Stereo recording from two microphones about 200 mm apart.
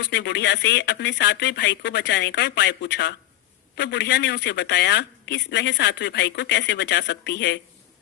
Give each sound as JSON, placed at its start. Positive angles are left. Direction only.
{"t": 0.0, "sound": "speech", "side_deg": 55}